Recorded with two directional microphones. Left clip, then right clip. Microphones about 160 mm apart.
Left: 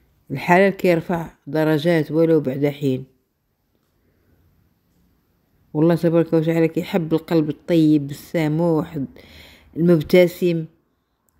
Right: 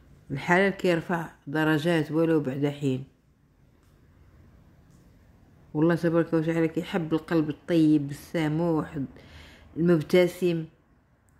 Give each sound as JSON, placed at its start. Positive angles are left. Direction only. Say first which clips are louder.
{"t": 0.3, "sound": "speech", "louder": "left 8 dB", "side_deg": 45}
{"t": 5.7, "sound": "speech", "louder": "left 7 dB", "side_deg": 45}